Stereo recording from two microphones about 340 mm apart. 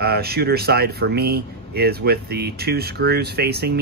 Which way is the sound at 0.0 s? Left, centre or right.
Right.